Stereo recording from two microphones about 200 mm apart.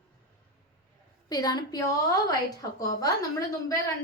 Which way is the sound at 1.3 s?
20° left (ahead or behind).